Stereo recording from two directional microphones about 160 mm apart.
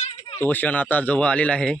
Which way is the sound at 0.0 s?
40° left (ahead or behind).